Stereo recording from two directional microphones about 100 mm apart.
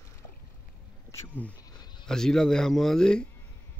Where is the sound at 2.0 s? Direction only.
5° left (ahead or behind).